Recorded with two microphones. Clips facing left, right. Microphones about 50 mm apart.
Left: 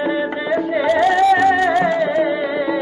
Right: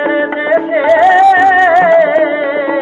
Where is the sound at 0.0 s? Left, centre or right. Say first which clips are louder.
Right 7 dB; right.